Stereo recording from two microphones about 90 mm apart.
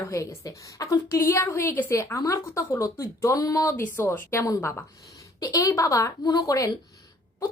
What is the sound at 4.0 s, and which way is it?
A woman's voice, 30° left (ahead or behind).